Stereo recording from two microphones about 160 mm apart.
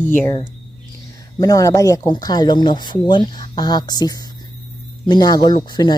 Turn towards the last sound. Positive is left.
turn(degrees=30)  # may be behind; listen again after turning